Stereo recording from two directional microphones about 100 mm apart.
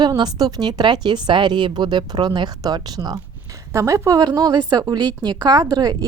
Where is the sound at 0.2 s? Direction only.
40° right (ahead or behind).